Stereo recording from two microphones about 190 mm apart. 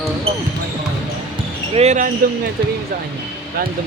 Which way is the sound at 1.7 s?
35° right (ahead or behind).